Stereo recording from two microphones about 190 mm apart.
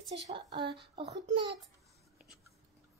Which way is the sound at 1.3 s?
25° right (ahead or behind).